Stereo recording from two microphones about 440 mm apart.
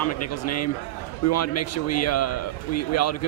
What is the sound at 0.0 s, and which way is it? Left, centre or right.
Speech, left.